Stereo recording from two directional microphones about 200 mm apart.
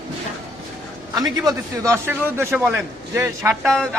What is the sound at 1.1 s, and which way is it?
A man's voice, 15° right (ahead or behind).